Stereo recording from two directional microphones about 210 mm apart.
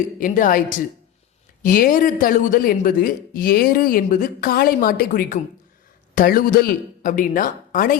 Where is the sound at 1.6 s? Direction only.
40° left (ahead or behind).